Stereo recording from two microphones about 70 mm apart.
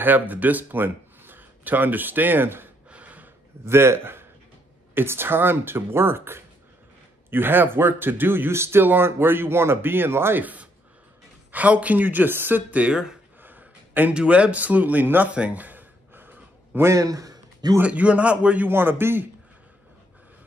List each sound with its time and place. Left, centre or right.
0.0 s speech: right
2.9 s gasp: right
3.6 s speech: right
10.4 s speech: right
12.8 s speech: centre
13.4 s a sound: right
14.1 s speech: centre
15.3 s a sound: centre
16.9 s a sound: right
17.8 s speech: centre
18.7 s speech: right